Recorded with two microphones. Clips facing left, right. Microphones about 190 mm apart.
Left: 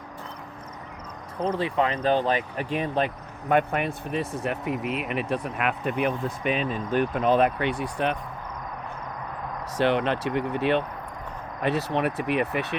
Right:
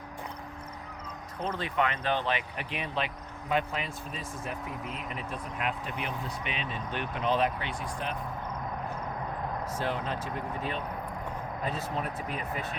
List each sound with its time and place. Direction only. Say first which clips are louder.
1.5 s speech: left 6 dB; 30° left (ahead or behind); by 3.1 s 45° left (ahead or behind)
3.5 s speech: left 8 dB; 55° left (ahead or behind)
9.7 s speech: left 12 dB; 75° left (ahead or behind)